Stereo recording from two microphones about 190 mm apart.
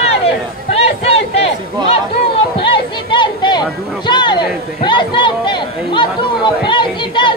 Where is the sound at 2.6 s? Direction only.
25° left (ahead or behind).